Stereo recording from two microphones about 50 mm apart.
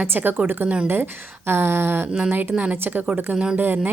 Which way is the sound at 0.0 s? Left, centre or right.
Right.